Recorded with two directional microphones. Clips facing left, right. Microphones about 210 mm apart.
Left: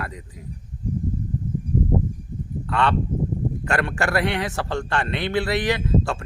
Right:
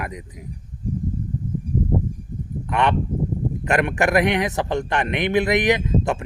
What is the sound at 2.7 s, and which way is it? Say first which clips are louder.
A man's voice: right 1 dB; 20° right (ahead or behind).